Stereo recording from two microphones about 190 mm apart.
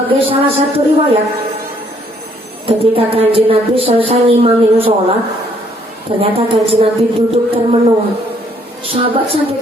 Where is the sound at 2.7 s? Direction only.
30° right (ahead or behind).